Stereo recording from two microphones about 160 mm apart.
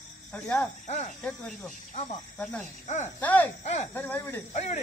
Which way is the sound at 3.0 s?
10° left (ahead or behind).